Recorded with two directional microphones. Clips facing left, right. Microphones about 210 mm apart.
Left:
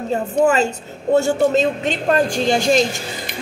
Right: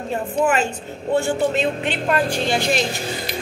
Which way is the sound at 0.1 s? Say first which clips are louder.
Left 4 dB; 40° left (ahead or behind).